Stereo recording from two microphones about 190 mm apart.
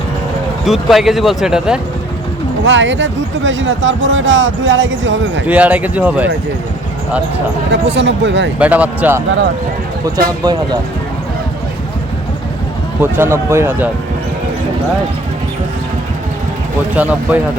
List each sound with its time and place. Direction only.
0.6 s speech: centre (ahead or behind)
2.6 s speech: 75° right (ahead or behind)
5.5 s speech: 10° right (ahead or behind)
7.7 s speech: 65° right (ahead or behind)
8.5 s speech: 5° right (ahead or behind)
10.4 s speech: 20° right (ahead or behind)
13.0 s speech: 10° right (ahead or behind)
16.9 s speech: 10° right (ahead or behind)